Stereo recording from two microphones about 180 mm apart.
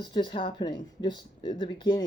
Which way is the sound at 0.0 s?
25° left (ahead or behind).